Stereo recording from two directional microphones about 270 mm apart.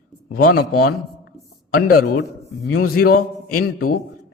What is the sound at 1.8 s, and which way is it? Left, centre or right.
Speech, left.